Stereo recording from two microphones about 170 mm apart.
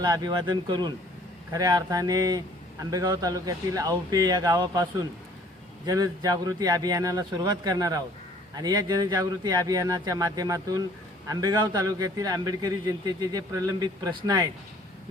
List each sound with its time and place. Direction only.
0.0 s a man's voice: 25° right (ahead or behind)